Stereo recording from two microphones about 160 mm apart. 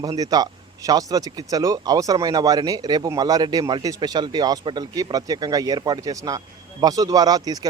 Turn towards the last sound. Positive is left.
turn(degrees=-25)  # may be behind; listen again after turning